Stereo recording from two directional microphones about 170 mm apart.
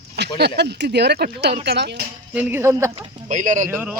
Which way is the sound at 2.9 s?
45° right (ahead or behind).